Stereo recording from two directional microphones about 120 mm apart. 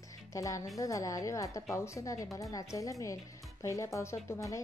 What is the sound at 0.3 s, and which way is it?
A woman's voice, 25° left (ahead or behind).